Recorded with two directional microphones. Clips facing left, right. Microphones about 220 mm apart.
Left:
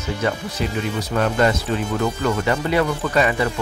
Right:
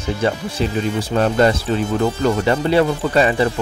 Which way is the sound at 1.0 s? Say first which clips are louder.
Right 3 dB; 30° right (ahead or behind).